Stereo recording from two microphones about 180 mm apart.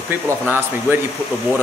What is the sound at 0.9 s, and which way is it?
Speech, 10° right (ahead or behind).